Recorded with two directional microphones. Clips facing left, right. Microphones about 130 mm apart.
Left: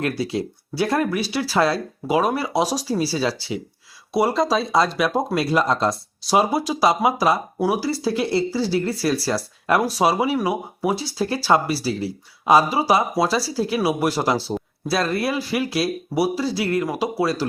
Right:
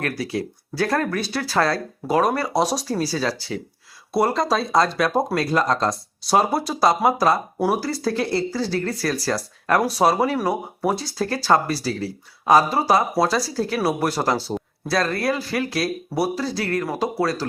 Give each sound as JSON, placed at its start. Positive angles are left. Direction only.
{"t": 0.0, "sound": "speech", "side_deg": 20}
{"t": 4.1, "sound": "speech", "side_deg": 0}
{"t": 8.2, "sound": "speech", "side_deg": 15}